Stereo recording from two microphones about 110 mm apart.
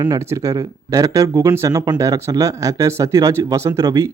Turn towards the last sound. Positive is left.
turn(degrees=-30)  # may be behind; listen again after turning